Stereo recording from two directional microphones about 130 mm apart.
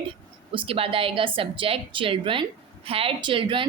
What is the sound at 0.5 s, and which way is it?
A woman's voice, 45° right (ahead or behind).